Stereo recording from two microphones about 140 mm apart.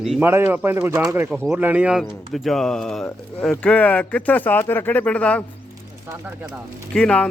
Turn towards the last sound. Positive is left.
turn(degrees=5)  # may be behind; listen again after turning